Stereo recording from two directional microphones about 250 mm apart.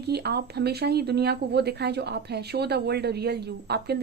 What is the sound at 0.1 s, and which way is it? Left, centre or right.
Speech, right.